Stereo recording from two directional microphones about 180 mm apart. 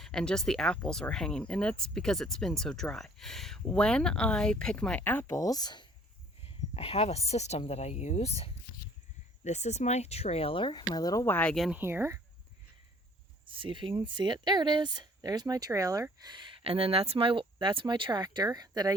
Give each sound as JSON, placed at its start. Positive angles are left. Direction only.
{"t": 0.0, "sound": "speech", "side_deg": 5}
{"t": 11.8, "sound": "speech", "side_deg": -15}
{"t": 13.4, "sound": "speech", "side_deg": -30}